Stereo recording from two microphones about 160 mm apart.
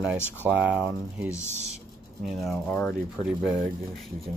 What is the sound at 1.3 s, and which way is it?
Speech, 45° right (ahead or behind).